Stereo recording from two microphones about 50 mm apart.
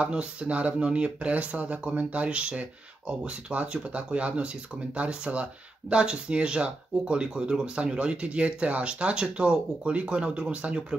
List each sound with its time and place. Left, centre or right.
0.0 s speech: right